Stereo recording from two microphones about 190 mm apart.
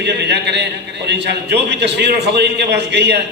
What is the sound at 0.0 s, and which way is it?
A man's voice, 65° right (ahead or behind).